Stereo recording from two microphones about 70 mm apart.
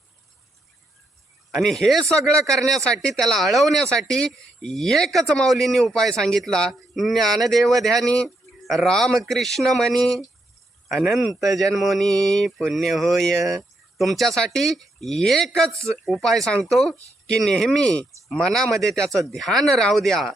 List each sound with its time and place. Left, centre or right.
1.6 s speech: centre
15.7 s speech: right
16.0 s speech: centre